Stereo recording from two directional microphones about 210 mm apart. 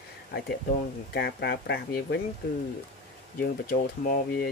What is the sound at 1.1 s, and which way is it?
Speech, 50° left (ahead or behind).